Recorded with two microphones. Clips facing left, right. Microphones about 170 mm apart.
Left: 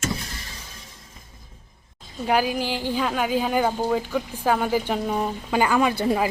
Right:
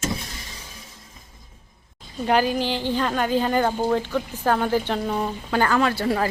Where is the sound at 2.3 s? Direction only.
10° left (ahead or behind).